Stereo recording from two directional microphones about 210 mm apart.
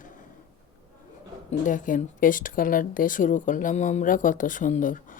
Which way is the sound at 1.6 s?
40° left (ahead or behind).